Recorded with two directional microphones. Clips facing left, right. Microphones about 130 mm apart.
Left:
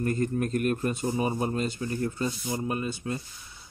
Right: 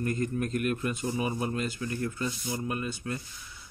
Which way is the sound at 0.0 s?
35° left (ahead or behind).